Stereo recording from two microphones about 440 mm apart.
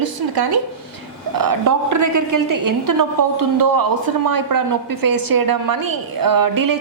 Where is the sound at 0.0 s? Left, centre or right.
Right.